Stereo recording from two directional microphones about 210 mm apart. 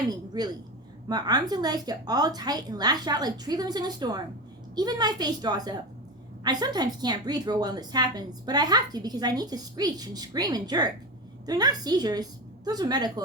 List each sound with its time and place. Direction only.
0.1 s a woman's voice: 20° right (ahead or behind)